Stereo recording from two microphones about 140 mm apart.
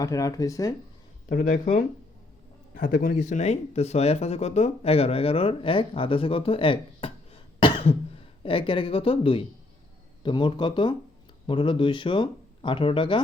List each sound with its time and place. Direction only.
0.0 s speech: 25° left (ahead or behind)
1.3 s speech: 75° left (ahead or behind)
2.7 s speech: 75° left (ahead or behind); by 7.1 s 40° left (ahead or behind)
7.6 s throat clearing: 45° left (ahead or behind)
8.4 s speech: 40° left (ahead or behind)